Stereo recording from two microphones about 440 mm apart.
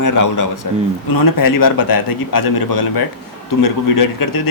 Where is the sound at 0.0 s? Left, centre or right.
Left.